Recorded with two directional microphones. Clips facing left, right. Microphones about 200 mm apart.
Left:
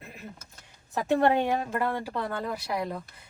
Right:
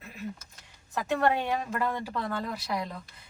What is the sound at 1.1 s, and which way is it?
Speech, 30° left (ahead or behind).